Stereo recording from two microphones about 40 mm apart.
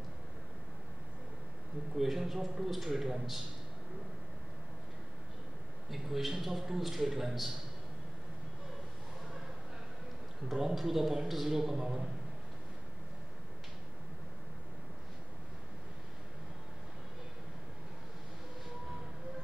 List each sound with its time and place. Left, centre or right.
2.0 s a man's voice: centre
5.9 s a man's voice: centre
10.5 s a man's voice: centre